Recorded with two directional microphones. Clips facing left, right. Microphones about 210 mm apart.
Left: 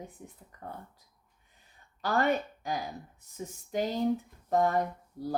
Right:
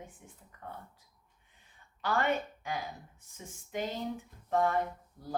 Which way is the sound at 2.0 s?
40° left (ahead or behind).